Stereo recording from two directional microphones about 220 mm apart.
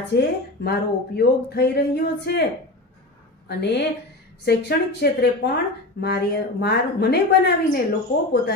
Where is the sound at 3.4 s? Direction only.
50° left (ahead or behind).